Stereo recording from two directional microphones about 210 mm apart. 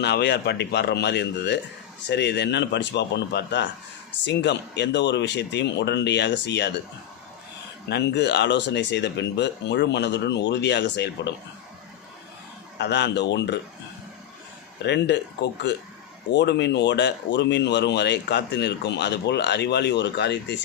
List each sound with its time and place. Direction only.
0.0 s speech: 55° left (ahead or behind)
7.9 s speech: 55° left (ahead or behind)
12.8 s speech: 55° left (ahead or behind)
14.8 s speech: 55° left (ahead or behind)